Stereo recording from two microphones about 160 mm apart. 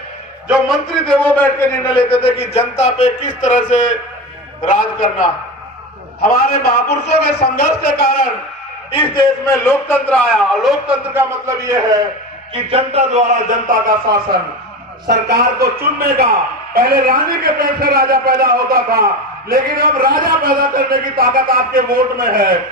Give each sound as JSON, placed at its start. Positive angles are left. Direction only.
{"t": 0.4, "sound": "a man's voice", "side_deg": 0}
{"t": 1.9, "sound": "a man's voice", "side_deg": 35}
{"t": 6.2, "sound": "a man's voice", "side_deg": 70}
{"t": 8.9, "sound": "a man's voice", "side_deg": 30}
{"t": 11.1, "sound": "a man's voice", "side_deg": -15}
{"t": 12.7, "sound": "speech", "side_deg": -45}
{"t": 15.0, "sound": "a man's voice", "side_deg": -75}